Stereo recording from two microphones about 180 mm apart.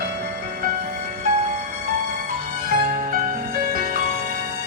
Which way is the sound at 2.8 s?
50° right (ahead or behind).